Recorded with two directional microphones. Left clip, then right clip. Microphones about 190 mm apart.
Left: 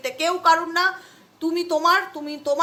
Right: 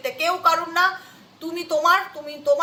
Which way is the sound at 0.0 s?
50° left (ahead or behind).